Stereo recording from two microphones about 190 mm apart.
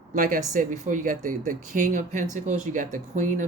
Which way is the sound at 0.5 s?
40° right (ahead or behind).